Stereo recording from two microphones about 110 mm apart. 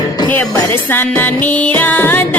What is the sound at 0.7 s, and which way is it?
Music, 20° left (ahead or behind).